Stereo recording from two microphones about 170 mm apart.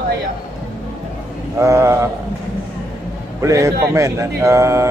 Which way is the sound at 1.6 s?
15° right (ahead or behind).